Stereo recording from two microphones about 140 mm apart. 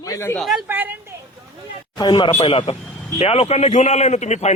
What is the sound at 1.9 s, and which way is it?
A man's voice, 35° left (ahead or behind).